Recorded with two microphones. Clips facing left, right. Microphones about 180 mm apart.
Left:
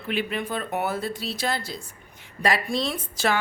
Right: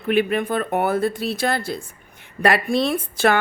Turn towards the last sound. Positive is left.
turn(degrees=-55)  # may be behind; listen again after turning